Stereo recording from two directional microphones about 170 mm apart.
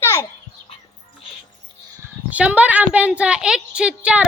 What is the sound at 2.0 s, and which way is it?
A woman's voice, 10° right (ahead or behind).